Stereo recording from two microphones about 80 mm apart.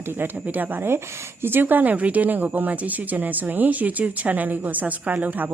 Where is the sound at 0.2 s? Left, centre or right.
Right.